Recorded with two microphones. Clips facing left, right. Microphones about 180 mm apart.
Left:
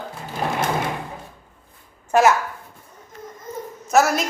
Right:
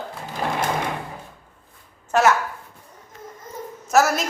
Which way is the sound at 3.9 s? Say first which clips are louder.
Left 1 dB; centre (ahead or behind).